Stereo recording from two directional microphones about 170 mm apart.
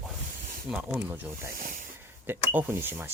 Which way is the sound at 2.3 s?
10° right (ahead or behind).